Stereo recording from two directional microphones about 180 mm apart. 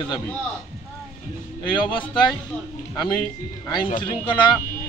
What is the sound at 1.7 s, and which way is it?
Speech, 25° left (ahead or behind).